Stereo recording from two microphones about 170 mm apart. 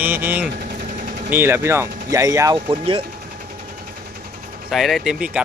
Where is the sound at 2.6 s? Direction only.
35° right (ahead or behind).